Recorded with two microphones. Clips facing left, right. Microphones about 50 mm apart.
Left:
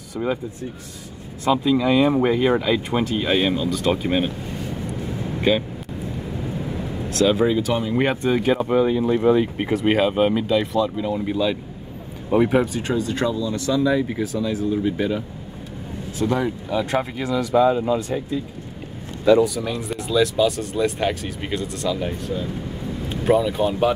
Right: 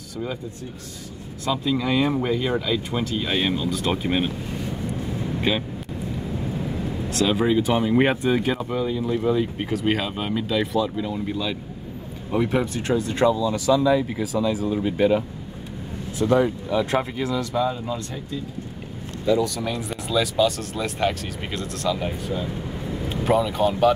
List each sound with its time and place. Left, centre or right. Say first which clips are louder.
1.4 s speech: left 6 dB; left
1.7 s speech: left 4 dB; centre
2.1 s speech: left 5 dB; left
3.4 s speech: left 3 dB; centre
7.2 s speech: left 2 dB; centre
8.5 s speech: left 6 dB; left
9.6 s speech: left 5 dB; centre
10.4 s speech: left 3 dB; centre
12.9 s speech: right 3 dB; right
13.3 s speech: right 3 dB; centre
14.7 s speech: right 2 dB; centre
16.3 s speech: right 4 dB; centre
19.4 s speech: left 3 dB; centre